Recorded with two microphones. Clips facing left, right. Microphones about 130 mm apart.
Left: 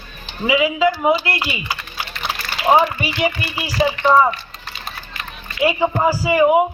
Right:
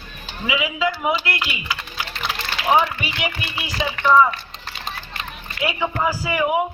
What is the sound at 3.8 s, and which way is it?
Speech, 35° left (ahead or behind).